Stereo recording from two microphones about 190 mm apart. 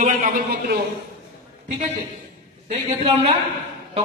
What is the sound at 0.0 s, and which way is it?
Speech, 40° right (ahead or behind).